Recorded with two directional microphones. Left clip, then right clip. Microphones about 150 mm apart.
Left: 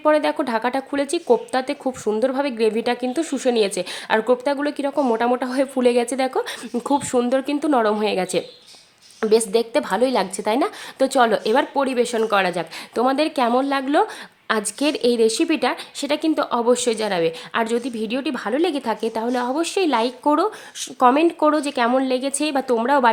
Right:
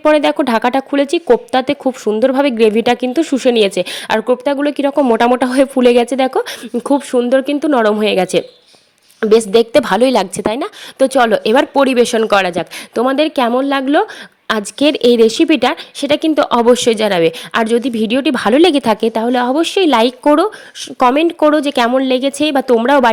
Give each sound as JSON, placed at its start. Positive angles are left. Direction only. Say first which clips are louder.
{"t": 0.0, "sound": "a woman's voice", "louder": "right 7 dB", "side_deg": -40}
{"t": 12.9, "sound": "speech", "louder": "right 6 dB", "side_deg": -35}
{"t": 14.4, "sound": "speech", "louder": "right 7 dB", "side_deg": -35}